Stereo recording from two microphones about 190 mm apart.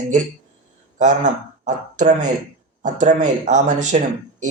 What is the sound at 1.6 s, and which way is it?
Speech, 40° right (ahead or behind).